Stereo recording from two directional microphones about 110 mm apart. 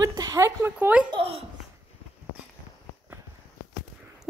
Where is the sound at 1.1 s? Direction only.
60° right (ahead or behind).